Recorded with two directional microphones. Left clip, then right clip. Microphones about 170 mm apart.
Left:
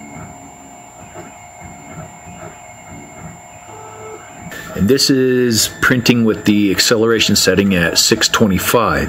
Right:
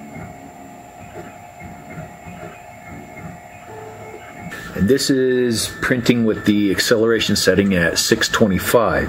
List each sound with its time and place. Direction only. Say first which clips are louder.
4.8 s speech: left 3 dB; 30° left (ahead or behind)